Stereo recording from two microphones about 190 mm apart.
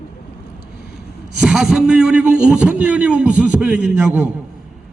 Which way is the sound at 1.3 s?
5° right (ahead or behind).